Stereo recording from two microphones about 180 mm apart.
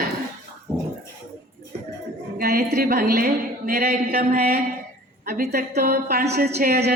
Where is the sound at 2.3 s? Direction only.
55° right (ahead or behind).